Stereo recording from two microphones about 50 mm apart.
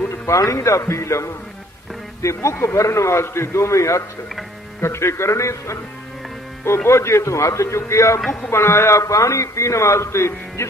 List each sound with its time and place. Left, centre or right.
0.3 s a man's voice: left
4.8 s a man's voice: left
6.9 s a man's voice: left
8.5 s a man's voice: left